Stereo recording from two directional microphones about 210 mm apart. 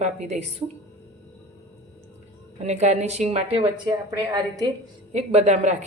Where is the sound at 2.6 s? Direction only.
30° right (ahead or behind).